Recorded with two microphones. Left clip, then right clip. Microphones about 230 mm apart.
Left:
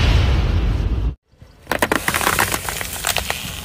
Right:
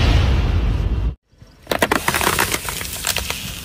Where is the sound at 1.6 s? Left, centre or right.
Centre.